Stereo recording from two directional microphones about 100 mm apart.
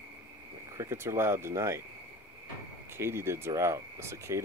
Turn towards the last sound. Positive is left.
turn(degrees=-25)  # may be behind; listen again after turning